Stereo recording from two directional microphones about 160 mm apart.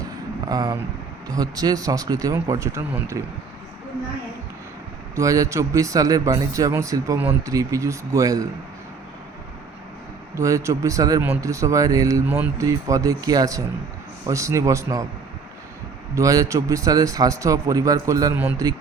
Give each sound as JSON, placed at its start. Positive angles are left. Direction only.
{"t": 0.4, "sound": "a man's voice", "side_deg": -25}
{"t": 5.1, "sound": "a man's voice", "side_deg": -20}
{"t": 10.3, "sound": "a man's voice", "side_deg": -20}
{"t": 16.1, "sound": "a man's voice", "side_deg": -20}